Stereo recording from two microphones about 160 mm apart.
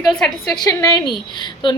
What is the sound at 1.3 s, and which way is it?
Speech, 30° left (ahead or behind).